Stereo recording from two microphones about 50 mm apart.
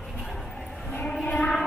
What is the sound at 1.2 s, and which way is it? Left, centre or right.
Music, left.